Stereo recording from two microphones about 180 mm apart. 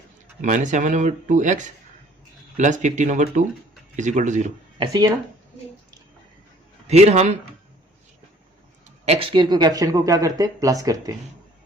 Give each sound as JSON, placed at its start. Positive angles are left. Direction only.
{"t": 0.4, "sound": "speech", "side_deg": -45}
{"t": 4.8, "sound": "speech", "side_deg": -20}
{"t": 6.8, "sound": "a man's voice", "side_deg": -35}
{"t": 9.0, "sound": "speech", "side_deg": -30}